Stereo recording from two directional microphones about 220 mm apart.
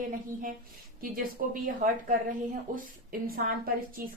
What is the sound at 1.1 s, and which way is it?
Speech, 40° right (ahead or behind).